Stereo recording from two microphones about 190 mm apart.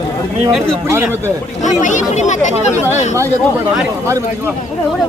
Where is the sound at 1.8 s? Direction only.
40° left (ahead or behind).